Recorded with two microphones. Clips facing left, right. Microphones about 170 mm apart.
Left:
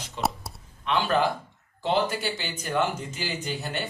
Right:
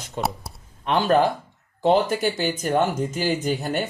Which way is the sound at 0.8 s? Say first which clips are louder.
Right 5 dB; 45° right (ahead or behind).